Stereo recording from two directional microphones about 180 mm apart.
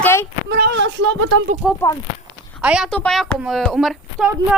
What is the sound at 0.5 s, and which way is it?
Speech, 70° right (ahead or behind).